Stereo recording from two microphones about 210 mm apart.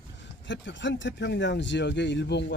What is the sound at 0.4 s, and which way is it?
Speech, 60° left (ahead or behind).